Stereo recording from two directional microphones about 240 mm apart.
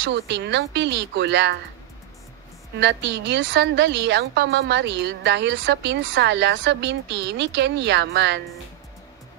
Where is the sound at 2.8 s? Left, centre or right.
Right.